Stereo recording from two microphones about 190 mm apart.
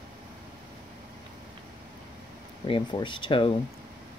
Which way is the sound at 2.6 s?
25° left (ahead or behind).